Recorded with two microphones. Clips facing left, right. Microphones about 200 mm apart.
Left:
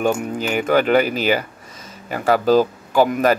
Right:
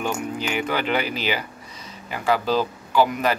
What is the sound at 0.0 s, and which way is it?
Speech, 45° left (ahead or behind).